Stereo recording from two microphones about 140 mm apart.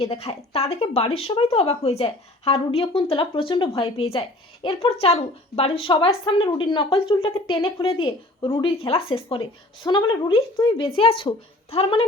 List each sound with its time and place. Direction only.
0.0 s speech: 45° left (ahead or behind)